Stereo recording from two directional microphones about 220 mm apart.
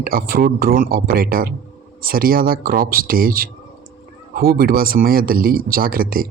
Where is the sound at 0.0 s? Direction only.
40° right (ahead or behind).